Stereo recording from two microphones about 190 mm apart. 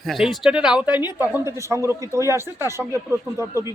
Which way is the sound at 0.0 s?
Centre (ahead or behind).